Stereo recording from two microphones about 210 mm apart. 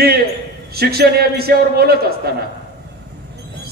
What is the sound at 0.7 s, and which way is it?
A man's voice, 50° right (ahead or behind).